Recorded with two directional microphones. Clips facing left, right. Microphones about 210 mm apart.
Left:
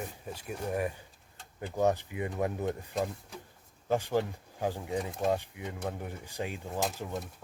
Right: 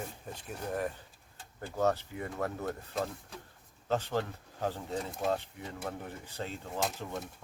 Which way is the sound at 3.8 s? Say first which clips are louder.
Left 3 dB; 10° left (ahead or behind).